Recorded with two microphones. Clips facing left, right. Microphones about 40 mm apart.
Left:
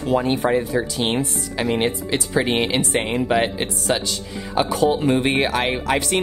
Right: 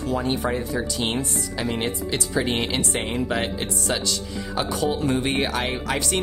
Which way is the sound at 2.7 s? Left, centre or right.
Centre.